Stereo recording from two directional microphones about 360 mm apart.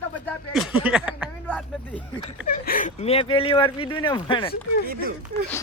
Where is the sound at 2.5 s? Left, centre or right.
Left.